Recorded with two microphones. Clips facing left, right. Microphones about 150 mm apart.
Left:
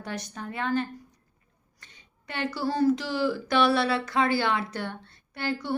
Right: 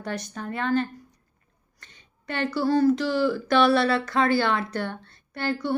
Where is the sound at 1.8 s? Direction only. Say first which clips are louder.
Right 2 dB; 10° left (ahead or behind).